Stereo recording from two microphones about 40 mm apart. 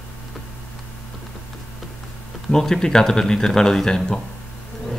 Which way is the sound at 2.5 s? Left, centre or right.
Centre.